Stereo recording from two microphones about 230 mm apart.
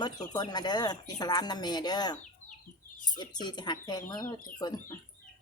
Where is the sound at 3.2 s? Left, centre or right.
Centre.